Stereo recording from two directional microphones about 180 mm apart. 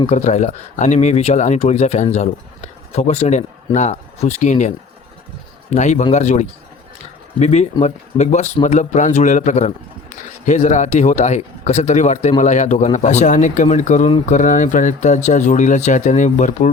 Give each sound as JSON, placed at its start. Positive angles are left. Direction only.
{"t": 0.0, "sound": "a man's voice", "side_deg": 40}
{"t": 5.7, "sound": "a man's voice", "side_deg": 40}